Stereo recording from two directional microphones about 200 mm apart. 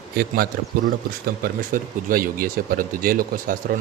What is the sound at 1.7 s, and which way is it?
Speech, 45° right (ahead or behind).